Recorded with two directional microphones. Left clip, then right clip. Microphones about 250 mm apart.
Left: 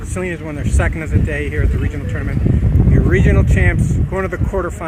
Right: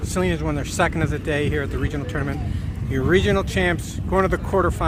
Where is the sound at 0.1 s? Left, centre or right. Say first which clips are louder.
Even; centre.